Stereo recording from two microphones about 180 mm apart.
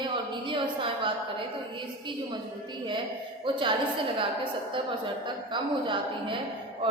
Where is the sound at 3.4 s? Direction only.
25° right (ahead or behind).